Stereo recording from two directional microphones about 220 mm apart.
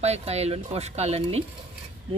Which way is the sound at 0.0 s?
30° right (ahead or behind).